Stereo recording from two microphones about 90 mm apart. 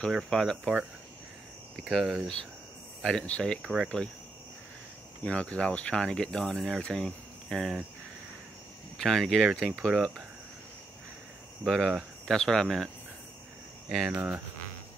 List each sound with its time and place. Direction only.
0.1 s speech: 5° left (ahead or behind)
1.8 s speech: centre (ahead or behind)
3.6 s speech: 5° right (ahead or behind)
5.2 s speech: 15° left (ahead or behind)
8.9 s speech: 5° left (ahead or behind)
11.6 s speech: centre (ahead or behind)
14.1 s cricket: 20° right (ahead or behind)